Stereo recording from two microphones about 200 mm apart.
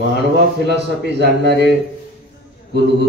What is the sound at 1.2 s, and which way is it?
Speech, 55° right (ahead or behind).